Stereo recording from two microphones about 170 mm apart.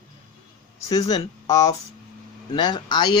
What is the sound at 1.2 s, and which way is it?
Speech, 20° left (ahead or behind).